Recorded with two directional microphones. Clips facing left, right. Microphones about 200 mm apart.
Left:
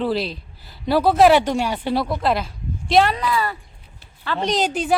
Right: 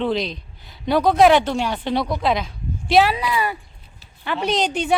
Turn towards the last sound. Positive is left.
turn(degrees=0)  # may be behind; listen again after turning